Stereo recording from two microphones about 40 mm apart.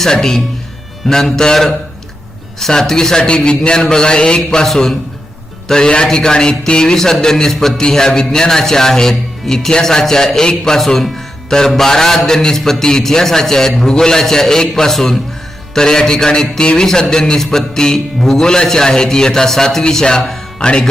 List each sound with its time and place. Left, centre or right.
0.0 s a man's voice: centre
5.6 s a man's voice: centre